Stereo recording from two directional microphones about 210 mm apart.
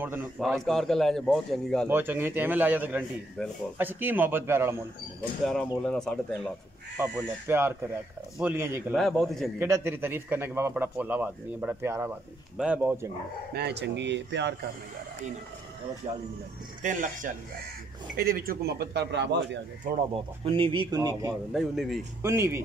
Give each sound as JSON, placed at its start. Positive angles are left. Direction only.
{"t": 0.0, "sound": "a man's voice", "side_deg": -10}
{"t": 0.4, "sound": "a man's voice", "side_deg": 0}
{"t": 1.9, "sound": "a man's voice", "side_deg": -10}
{"t": 3.4, "sound": "a man's voice", "side_deg": 0}
{"t": 3.7, "sound": "a man's voice", "side_deg": -10}
{"t": 5.4, "sound": "a man's voice", "side_deg": 5}
{"t": 7.0, "sound": "a man's voice", "side_deg": -10}
{"t": 8.9, "sound": "a man's voice", "side_deg": 0}
{"t": 9.6, "sound": "a man's voice", "side_deg": -10}
{"t": 13.5, "sound": "speech", "side_deg": -50}
{"t": 16.8, "sound": "speech", "side_deg": -40}
{"t": 20.4, "sound": "speech", "side_deg": -25}
{"t": 21.5, "sound": "a man's voice", "side_deg": 0}
{"t": 22.2, "sound": "a man's voice", "side_deg": -10}